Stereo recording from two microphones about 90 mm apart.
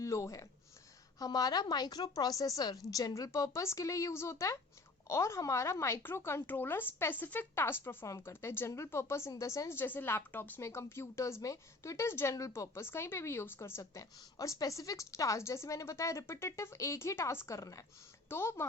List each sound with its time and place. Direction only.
0.0 s a woman's voice: 35° left (ahead or behind)
18.3 s a woman's voice: 30° left (ahead or behind)